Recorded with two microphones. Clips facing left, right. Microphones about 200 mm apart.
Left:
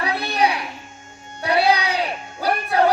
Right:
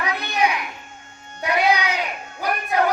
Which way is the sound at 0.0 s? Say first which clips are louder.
Left 2 dB; 35° left (ahead or behind).